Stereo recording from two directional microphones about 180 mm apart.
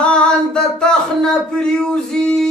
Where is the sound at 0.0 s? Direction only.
5° left (ahead or behind).